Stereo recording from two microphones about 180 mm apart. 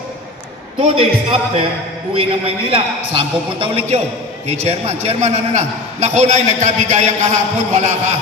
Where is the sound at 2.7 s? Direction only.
30° right (ahead or behind).